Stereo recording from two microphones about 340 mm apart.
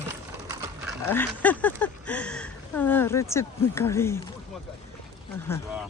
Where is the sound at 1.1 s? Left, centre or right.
Centre.